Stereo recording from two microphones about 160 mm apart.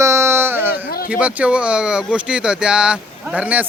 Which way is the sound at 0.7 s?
70° left (ahead or behind).